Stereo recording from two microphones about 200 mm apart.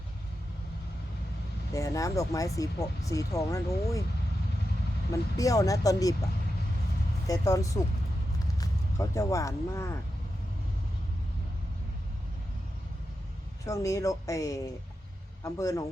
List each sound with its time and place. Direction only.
1.7 s speech: 15° left (ahead or behind)
5.4 s speech: 15° left (ahead or behind)
7.3 s speech: 15° left (ahead or behind)
13.7 s speech: 15° left (ahead or behind)